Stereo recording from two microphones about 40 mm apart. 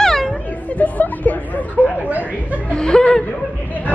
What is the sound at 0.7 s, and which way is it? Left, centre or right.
Speech, left.